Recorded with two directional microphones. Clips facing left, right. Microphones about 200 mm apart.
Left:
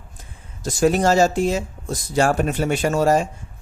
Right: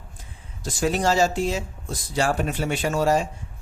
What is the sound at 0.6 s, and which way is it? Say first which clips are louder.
A man's voice: left 5 dB; 45° left (ahead or behind).